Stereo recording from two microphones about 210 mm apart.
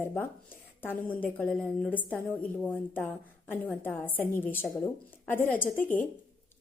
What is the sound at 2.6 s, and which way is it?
A woman's voice, 10° left (ahead or behind).